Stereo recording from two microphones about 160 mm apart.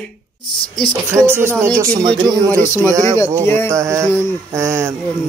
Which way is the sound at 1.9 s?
30° right (ahead or behind).